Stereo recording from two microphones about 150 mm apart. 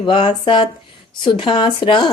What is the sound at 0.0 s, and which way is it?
Speech, 30° left (ahead or behind).